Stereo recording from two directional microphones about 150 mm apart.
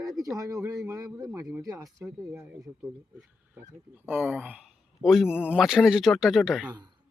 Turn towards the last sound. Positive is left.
turn(degrees=-5)  # may be behind; listen again after turning